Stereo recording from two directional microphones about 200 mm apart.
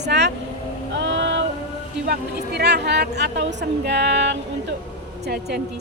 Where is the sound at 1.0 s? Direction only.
65° right (ahead or behind).